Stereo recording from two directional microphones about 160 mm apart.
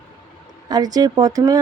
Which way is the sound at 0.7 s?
25° right (ahead or behind).